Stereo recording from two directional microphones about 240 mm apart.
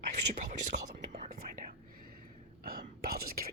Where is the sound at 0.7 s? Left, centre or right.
Right.